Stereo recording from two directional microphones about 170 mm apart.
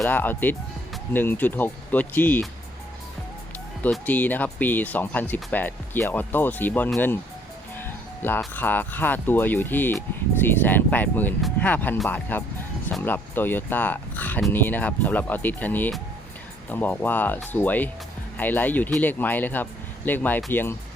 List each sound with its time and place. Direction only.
0.0 s speech: 10° left (ahead or behind)
3.8 s speech: 10° left (ahead or behind)
7.8 s music: 10° left (ahead or behind)
8.4 s speech: 10° left (ahead or behind)